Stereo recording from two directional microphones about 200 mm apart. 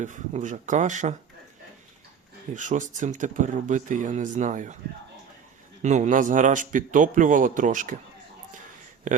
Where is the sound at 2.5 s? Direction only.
40° right (ahead or behind).